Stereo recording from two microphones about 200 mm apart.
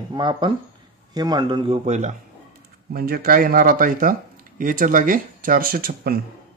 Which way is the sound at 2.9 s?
50° right (ahead or behind).